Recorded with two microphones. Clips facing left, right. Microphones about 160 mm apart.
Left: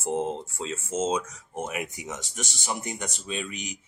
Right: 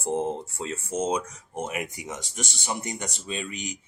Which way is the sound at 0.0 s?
15° right (ahead or behind).